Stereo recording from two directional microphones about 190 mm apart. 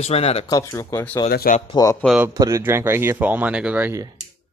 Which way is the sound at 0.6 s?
15° left (ahead or behind).